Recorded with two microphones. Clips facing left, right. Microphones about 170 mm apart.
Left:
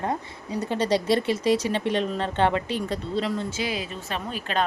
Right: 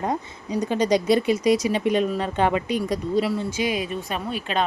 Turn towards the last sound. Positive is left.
turn(degrees=40)  # may be behind; listen again after turning